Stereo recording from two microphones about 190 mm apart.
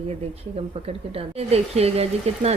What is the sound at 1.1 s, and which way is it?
Speech, 35° right (ahead or behind).